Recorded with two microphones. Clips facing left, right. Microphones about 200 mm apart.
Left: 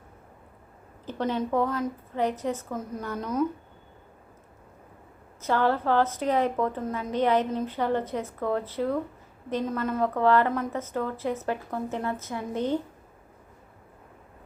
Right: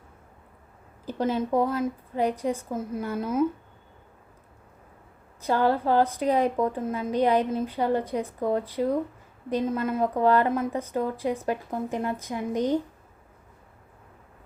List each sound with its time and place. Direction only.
1.0 s a woman's voice: 10° right (ahead or behind)
5.5 s a woman's voice: 15° right (ahead or behind)